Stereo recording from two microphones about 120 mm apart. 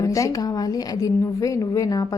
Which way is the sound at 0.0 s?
25° left (ahead or behind).